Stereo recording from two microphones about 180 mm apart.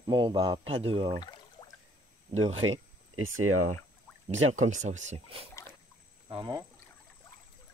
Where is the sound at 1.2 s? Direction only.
25° left (ahead or behind).